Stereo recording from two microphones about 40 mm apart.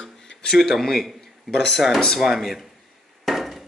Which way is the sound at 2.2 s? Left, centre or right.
Centre.